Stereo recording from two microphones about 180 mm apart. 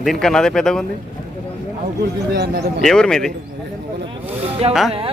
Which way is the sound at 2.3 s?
65° right (ahead or behind).